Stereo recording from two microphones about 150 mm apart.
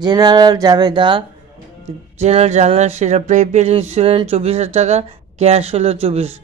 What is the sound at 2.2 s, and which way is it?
Speech, 45° right (ahead or behind).